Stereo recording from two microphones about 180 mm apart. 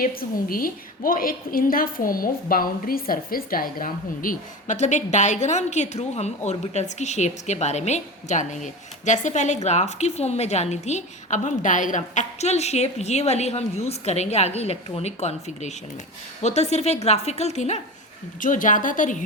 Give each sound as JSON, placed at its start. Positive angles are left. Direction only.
{"t": 0.0, "sound": "a woman's voice", "side_deg": 55}